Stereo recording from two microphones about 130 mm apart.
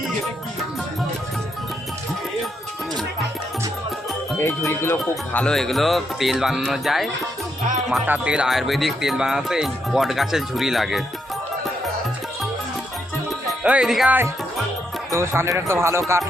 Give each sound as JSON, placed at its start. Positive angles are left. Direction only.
{"t": 4.4, "sound": "speech", "side_deg": 20}
{"t": 5.3, "sound": "speech", "side_deg": 10}
{"t": 13.5, "sound": "speech", "side_deg": -5}
{"t": 15.1, "sound": "speech", "side_deg": -20}